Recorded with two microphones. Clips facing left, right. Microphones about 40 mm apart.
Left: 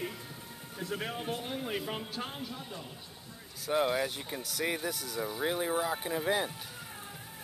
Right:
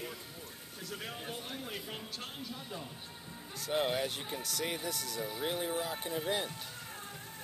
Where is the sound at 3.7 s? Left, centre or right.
Centre.